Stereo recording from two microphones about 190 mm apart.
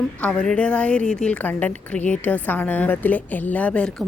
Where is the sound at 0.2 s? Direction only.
5° left (ahead or behind).